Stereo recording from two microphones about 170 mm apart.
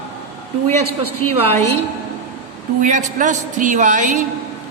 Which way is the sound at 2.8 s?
45° right (ahead or behind).